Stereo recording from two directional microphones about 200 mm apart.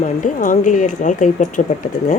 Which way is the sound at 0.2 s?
40° left (ahead or behind).